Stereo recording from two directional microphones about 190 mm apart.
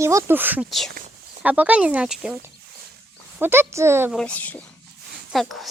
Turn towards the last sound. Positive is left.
turn(degrees=0)  # may be behind; listen again after turning